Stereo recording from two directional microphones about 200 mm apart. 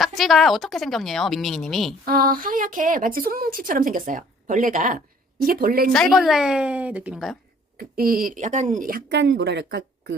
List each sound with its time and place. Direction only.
0.2 s speech: centre (ahead or behind)
2.0 s a woman's voice: 45° right (ahead or behind)
5.9 s speech: centre (ahead or behind)
7.8 s a woman's voice: 45° right (ahead or behind)